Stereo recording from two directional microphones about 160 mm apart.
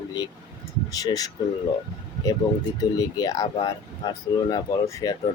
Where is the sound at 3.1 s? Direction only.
25° left (ahead or behind).